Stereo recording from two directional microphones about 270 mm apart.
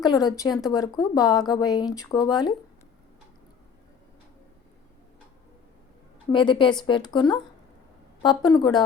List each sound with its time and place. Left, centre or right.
0.0 s a woman's voice: centre
6.3 s a woman's voice: centre